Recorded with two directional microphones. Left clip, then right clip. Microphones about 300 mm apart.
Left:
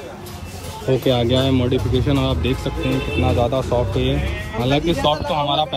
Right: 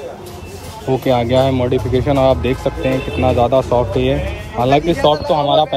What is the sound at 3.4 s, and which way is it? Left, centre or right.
Speech, right.